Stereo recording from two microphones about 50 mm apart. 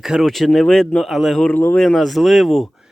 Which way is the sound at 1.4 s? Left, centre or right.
Left.